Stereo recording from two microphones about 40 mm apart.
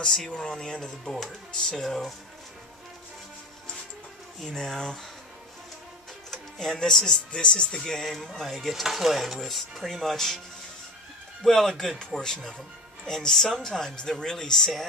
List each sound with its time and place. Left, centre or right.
0.0 s speech: centre
4.5 s speech: centre
6.3 s speech: centre
7.3 s speech: left; by 10.4 s centre
11.4 s speech: centre
12.1 s speech: centre
13.1 s speech: centre